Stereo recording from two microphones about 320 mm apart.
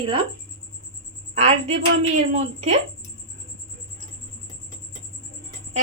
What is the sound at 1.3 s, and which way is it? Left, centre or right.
Speech, centre.